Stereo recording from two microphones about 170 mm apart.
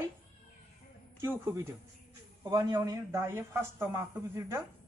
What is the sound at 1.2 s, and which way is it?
A man's voice, 15° right (ahead or behind).